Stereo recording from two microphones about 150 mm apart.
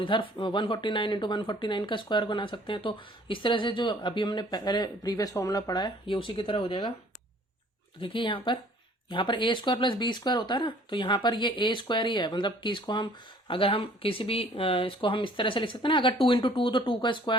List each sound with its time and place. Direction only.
0.0 s speech: 35° left (ahead or behind)
8.0 s speech: 35° left (ahead or behind)